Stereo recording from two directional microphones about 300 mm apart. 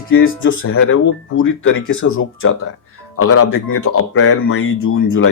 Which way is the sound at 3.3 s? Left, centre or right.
Left.